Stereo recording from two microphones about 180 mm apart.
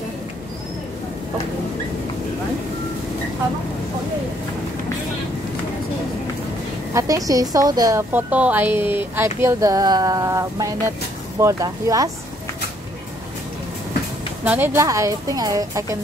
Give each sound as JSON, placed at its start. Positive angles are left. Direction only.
{"t": 6.9, "sound": "a woman's voice", "side_deg": -20}
{"t": 8.1, "sound": "a woman's voice", "side_deg": -10}
{"t": 14.4, "sound": "speech", "side_deg": -10}